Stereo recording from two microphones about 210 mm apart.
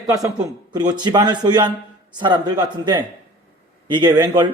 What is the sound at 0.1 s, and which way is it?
A man's voice, 20° right (ahead or behind).